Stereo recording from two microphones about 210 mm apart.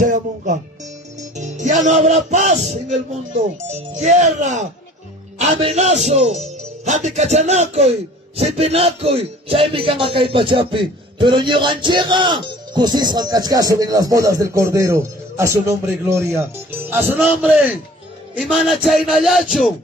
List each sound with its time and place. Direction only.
0.0 s music: 35° right (ahead or behind)
5.4 s a man's voice: 30° right (ahead or behind); by 19.7 s centre (ahead or behind)